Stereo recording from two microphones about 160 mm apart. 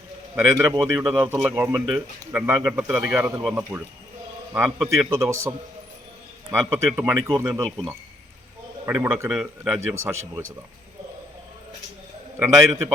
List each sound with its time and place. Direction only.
0.3 s a man's voice: 15° right (ahead or behind)
8.9 s a man's voice: 15° right (ahead or behind)
9.3 s speech: 5° right (ahead or behind)
9.9 s a man's voice: 15° right (ahead or behind)
12.4 s a man's voice: 15° right (ahead or behind)